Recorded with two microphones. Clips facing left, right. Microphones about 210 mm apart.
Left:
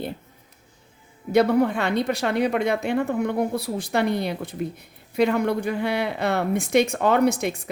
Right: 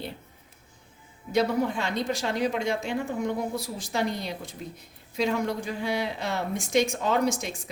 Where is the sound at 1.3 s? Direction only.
60° left (ahead or behind).